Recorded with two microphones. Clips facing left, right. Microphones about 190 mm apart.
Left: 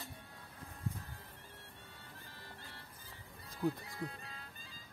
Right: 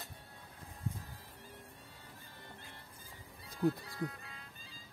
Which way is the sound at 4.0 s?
30° left (ahead or behind).